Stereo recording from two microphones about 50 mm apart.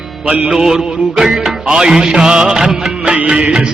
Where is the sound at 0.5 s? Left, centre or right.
Centre.